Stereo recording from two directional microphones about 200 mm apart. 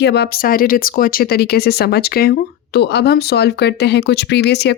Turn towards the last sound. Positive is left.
turn(degrees=55)  # may be behind; listen again after turning